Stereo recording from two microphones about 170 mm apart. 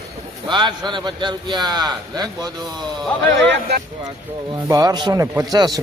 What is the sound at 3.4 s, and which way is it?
Speech, 90° right.